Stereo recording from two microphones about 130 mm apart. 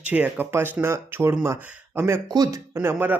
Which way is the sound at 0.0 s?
10° right (ahead or behind).